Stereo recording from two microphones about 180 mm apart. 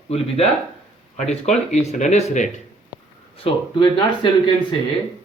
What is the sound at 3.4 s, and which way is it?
Speech, 30° left (ahead or behind).